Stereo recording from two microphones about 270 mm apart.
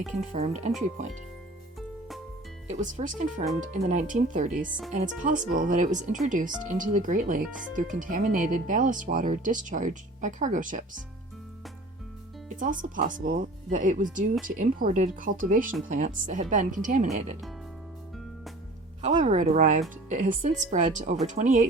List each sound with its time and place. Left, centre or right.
0.2 s speech: right
2.6 s speech: right
12.5 s speech: right
19.0 s speech: right